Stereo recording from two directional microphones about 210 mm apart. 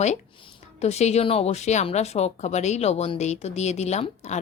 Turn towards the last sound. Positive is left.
turn(degrees=30)  # may be behind; listen again after turning